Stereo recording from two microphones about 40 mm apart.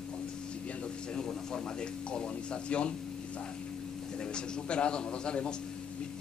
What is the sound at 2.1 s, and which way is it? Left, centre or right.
Speech, left.